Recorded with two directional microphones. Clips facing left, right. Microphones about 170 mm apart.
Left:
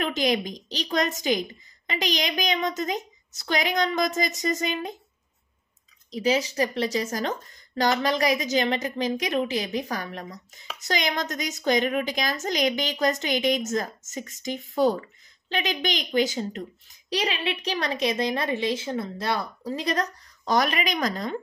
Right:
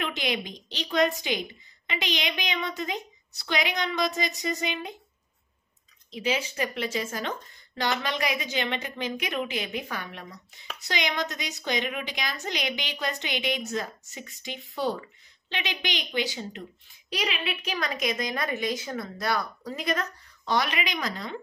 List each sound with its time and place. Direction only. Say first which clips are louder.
0.0 s speech: left 6 dB; 40° left (ahead or behind)
6.1 s speech: left 5 dB; 40° left (ahead or behind)
17.2 s a woman's voice: left 2 dB; 30° left (ahead or behind)